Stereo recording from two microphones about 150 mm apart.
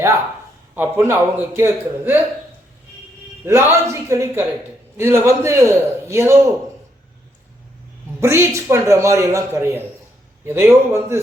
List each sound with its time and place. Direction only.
0.7 s a man's voice: 15° right (ahead or behind)
3.4 s a man's voice: 15° right (ahead or behind)
8.2 s a man's voice: 15° right (ahead or behind)